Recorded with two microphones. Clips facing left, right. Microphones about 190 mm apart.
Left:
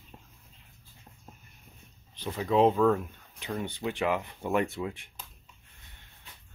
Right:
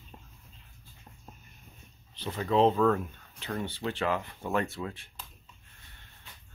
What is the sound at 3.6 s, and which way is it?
Speech, 15° left (ahead or behind).